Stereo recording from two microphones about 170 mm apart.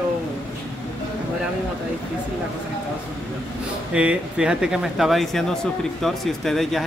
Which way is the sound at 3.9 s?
5° right (ahead or behind).